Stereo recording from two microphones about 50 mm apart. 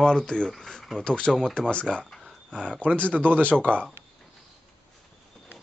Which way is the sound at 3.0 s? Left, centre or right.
Left.